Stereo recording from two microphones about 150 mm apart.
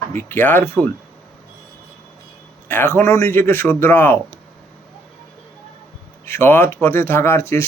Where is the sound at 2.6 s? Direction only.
15° left (ahead or behind).